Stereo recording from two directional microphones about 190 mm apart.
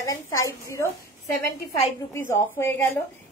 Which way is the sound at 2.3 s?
15° left (ahead or behind).